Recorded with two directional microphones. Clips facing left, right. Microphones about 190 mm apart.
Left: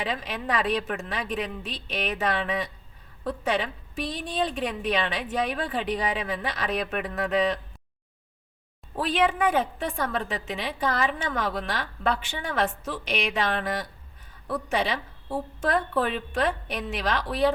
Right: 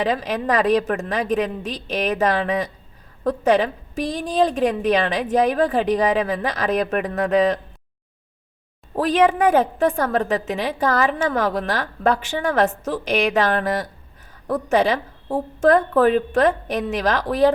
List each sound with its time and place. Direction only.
0.0 s a woman's voice: 40° right (ahead or behind)
9.0 s a woman's voice: 45° right (ahead or behind)